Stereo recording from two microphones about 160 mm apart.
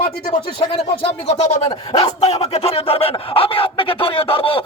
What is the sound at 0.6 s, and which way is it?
Speech, 40° left (ahead or behind).